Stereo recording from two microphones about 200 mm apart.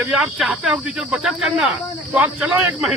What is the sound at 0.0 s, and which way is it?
Speech, centre (ahead or behind).